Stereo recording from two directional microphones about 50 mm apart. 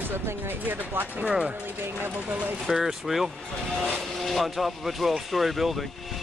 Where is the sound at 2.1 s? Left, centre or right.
Right.